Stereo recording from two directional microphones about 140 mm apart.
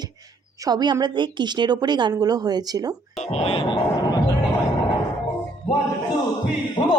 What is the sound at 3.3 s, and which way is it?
Speech, 45° left (ahead or behind).